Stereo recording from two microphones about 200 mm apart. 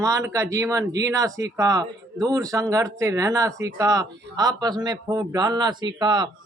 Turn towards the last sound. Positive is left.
turn(degrees=-20)  # may be behind; listen again after turning